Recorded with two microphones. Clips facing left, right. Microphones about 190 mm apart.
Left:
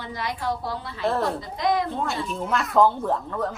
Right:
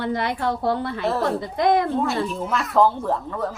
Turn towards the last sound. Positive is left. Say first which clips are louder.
# right 1 dB
turn(degrees=0)  # may be behind; listen again after turning